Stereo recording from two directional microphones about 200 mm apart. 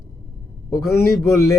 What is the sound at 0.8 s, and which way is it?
Speech, 15° left (ahead or behind).